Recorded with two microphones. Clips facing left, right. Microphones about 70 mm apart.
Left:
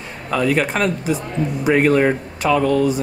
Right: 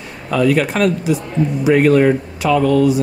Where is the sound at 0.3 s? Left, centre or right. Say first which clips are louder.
Right 3 dB; centre.